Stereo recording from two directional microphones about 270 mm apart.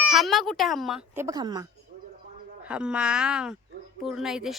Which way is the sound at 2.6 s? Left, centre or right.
Centre.